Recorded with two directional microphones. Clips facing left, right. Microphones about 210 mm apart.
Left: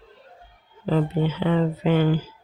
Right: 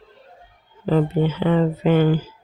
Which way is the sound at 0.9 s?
50° right (ahead or behind).